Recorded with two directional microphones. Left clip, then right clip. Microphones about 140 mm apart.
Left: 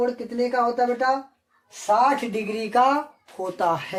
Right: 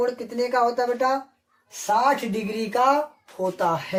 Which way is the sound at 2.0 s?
35° left (ahead or behind).